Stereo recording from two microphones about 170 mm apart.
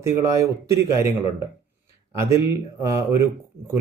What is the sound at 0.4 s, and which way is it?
Speech, 20° right (ahead or behind).